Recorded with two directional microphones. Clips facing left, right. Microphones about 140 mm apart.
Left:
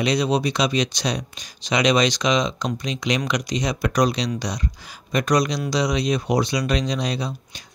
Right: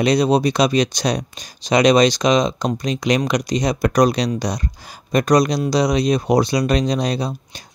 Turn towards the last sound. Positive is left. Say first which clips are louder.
# right 4 dB
turn(degrees=-40)  # may be behind; listen again after turning